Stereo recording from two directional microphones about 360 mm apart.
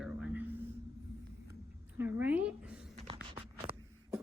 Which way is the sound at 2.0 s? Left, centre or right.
Centre.